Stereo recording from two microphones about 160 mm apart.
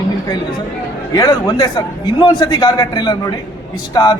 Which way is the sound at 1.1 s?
25° left (ahead or behind).